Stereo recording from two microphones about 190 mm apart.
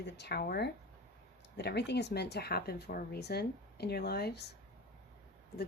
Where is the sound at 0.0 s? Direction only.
60° left (ahead or behind).